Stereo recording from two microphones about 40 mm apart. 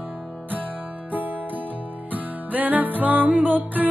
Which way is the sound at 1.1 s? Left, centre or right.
Right.